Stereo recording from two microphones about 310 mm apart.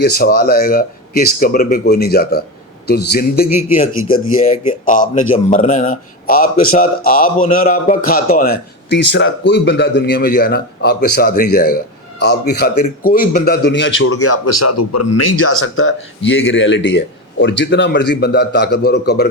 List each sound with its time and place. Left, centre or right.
0.0 s a man's voice: left